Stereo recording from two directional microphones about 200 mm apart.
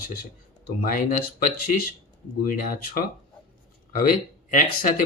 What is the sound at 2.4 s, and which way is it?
Speech, 45° left (ahead or behind).